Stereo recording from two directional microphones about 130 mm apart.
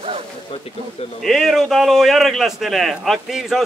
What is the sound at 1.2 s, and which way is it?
A man's voice, centre (ahead or behind).